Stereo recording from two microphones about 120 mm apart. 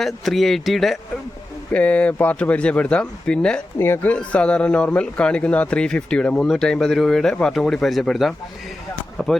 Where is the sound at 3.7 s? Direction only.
20° left (ahead or behind).